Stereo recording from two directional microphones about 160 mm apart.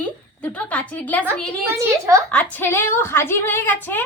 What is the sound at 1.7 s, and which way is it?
Speech, 20° right (ahead or behind).